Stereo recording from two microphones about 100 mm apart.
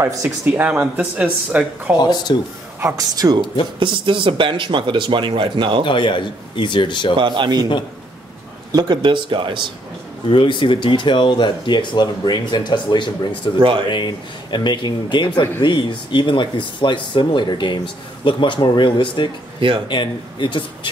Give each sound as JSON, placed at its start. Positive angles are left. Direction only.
{"t": 0.5, "sound": "speech", "side_deg": -15}
{"t": 2.0, "sound": "speech", "side_deg": 45}
{"t": 2.8, "sound": "speech", "side_deg": -35}
{"t": 3.8, "sound": "speech", "side_deg": -55}
{"t": 5.9, "sound": "a man's voice", "side_deg": 55}
{"t": 7.2, "sound": "speech", "side_deg": -50}
{"t": 8.7, "sound": "speech", "side_deg": -50}
{"t": 10.3, "sound": "speech", "side_deg": 55}
{"t": 13.6, "sound": "speech", "side_deg": -55}
{"t": 13.8, "sound": "speech", "side_deg": 50}